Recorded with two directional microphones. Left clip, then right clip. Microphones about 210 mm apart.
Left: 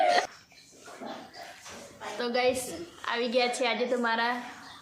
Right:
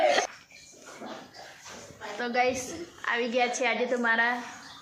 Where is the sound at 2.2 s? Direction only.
5° left (ahead or behind).